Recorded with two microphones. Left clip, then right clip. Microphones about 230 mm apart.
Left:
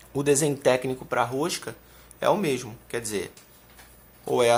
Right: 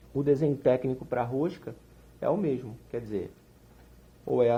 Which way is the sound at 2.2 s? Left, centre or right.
Centre.